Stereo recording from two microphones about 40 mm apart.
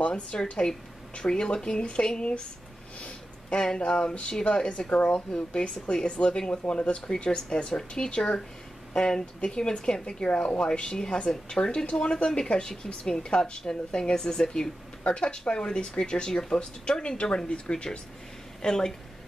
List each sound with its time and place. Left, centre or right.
0.0 s speech: left
3.0 s a sound: left
3.6 s a woman's voice: left